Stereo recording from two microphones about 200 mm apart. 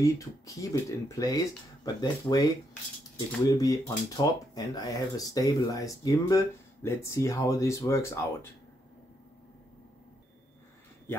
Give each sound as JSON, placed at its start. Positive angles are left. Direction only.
{"t": 0.0, "sound": "speech", "side_deg": 15}